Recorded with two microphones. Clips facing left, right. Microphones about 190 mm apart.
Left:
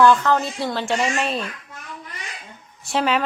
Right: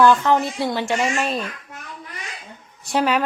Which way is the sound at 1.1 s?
5° right (ahead or behind).